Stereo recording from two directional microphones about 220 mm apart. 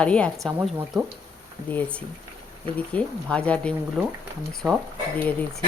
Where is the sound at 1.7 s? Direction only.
5° left (ahead or behind).